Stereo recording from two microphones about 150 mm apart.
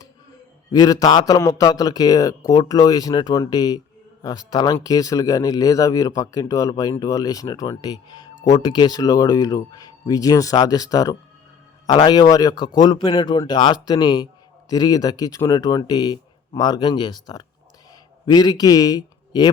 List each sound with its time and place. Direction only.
0.7 s a man's voice: 25° left (ahead or behind)